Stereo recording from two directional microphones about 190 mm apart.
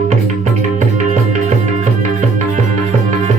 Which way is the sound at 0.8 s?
40° right (ahead or behind).